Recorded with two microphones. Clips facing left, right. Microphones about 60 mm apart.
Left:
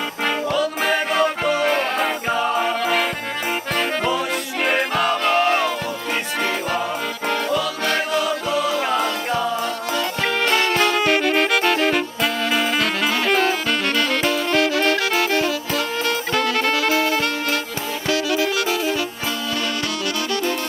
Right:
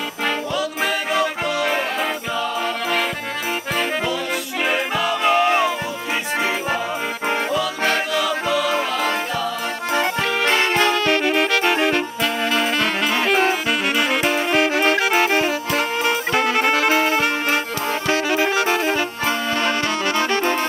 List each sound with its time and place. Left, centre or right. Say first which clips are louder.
0.6 s music: left 2 dB; centre
5.2 s music: right 4 dB; centre
8.2 s music: right 1 dB; right
10.4 s music: right 1 dB; right
11.0 s saxophone: left 1 dB; centre
11.6 s music: even; centre
11.9 s music: even; centre
12.7 s saxophone: right 1 dB; centre
14.5 s music: right 1 dB; right
18.0 s saxophone: even; right
20.2 s music: right 3 dB; right